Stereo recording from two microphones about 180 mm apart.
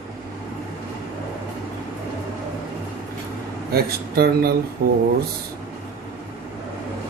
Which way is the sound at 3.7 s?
60° right (ahead or behind).